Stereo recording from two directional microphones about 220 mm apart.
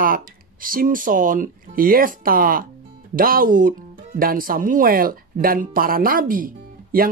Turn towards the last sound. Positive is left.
turn(degrees=-40)  # may be behind; listen again after turning